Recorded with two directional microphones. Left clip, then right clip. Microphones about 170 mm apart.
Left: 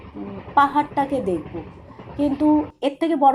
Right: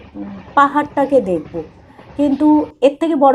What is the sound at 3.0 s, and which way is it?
Speech, 15° right (ahead or behind).